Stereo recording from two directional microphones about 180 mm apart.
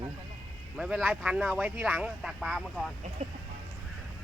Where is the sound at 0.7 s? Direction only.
Centre (ahead or behind).